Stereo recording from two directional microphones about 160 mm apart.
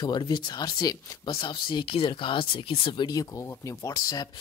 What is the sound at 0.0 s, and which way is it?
Speech, 30° left (ahead or behind).